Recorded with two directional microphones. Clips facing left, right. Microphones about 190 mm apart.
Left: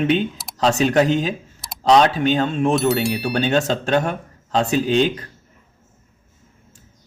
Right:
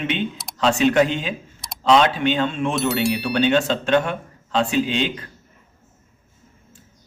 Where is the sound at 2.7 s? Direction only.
Centre (ahead or behind).